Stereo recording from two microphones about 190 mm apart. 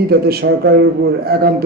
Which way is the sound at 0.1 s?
55° right (ahead or behind).